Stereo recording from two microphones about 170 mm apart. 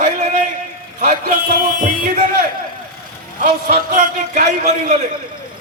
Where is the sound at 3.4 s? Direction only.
55° right (ahead or behind).